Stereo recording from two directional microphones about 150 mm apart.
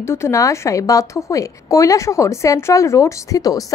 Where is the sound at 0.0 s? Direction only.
20° left (ahead or behind).